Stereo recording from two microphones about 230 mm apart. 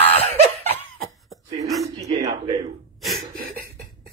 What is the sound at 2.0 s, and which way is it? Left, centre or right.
Speech, right.